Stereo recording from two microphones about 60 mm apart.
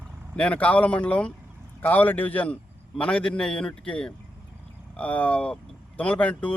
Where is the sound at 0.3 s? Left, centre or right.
Left.